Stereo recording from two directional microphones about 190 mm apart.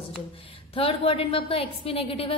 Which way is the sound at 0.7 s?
30° left (ahead or behind).